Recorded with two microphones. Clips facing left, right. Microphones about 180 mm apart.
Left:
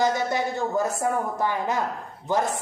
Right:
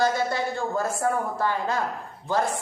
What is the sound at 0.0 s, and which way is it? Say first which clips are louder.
A woman's voice: left 1 dB; 20° left (ahead or behind).